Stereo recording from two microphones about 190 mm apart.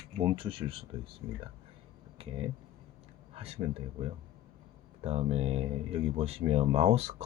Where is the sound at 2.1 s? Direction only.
30° right (ahead or behind).